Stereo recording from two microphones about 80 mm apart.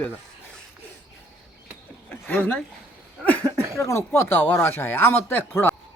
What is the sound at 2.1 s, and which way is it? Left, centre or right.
Speech, left.